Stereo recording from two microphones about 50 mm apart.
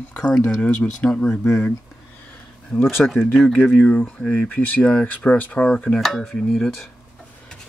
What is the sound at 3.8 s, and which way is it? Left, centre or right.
Speech, left.